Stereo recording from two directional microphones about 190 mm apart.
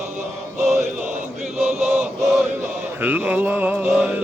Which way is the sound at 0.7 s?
40° right (ahead or behind).